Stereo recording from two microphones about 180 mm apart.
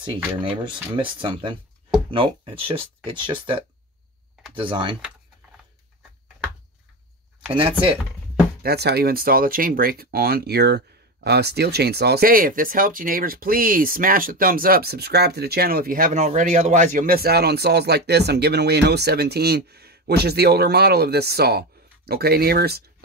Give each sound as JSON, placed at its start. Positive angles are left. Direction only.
{"t": 0.4, "sound": "speech", "side_deg": -30}
{"t": 7.5, "sound": "speech", "side_deg": -30}
{"t": 8.6, "sound": "speech", "side_deg": -65}